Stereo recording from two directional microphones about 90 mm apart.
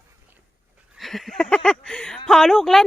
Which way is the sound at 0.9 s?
Centre (ahead or behind).